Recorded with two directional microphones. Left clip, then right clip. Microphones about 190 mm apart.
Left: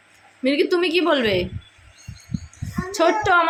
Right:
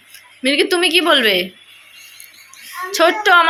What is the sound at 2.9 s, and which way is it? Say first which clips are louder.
Speech: right 5 dB; centre (ahead or behind).